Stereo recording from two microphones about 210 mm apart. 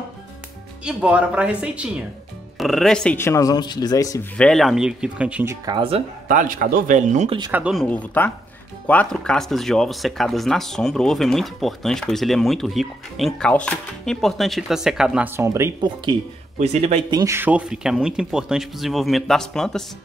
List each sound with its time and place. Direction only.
0.8 s speech: 5° right (ahead or behind); by 4.3 s 15° left (ahead or behind)
4.4 s speech: centre (ahead or behind)
5.8 s speech: 30° right (ahead or behind)
7.5 s speech: centre (ahead or behind)
16.5 s speech: 30° right (ahead or behind)
17.2 s speech: 10° right (ahead or behind)